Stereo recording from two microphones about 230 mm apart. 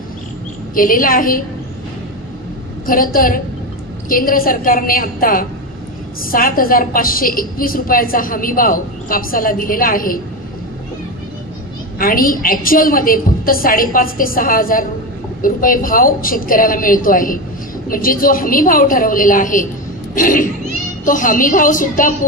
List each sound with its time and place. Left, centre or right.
0.7 s a woman's voice: left
2.9 s a woman's voice: left
12.0 s a woman's voice: left